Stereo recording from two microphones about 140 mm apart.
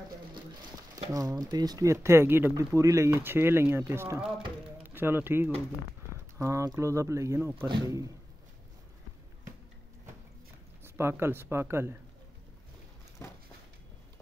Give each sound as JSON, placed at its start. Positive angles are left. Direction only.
{"t": 1.1, "sound": "speech", "side_deg": -25}
{"t": 7.5, "sound": "speech", "side_deg": -35}
{"t": 10.8, "sound": "speech", "side_deg": -15}